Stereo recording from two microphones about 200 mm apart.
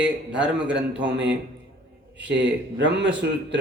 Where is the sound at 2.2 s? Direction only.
60° right (ahead or behind).